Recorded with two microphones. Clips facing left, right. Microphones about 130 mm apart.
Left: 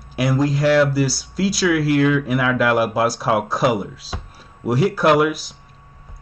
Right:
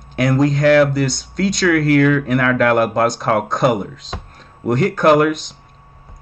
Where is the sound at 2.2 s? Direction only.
5° left (ahead or behind).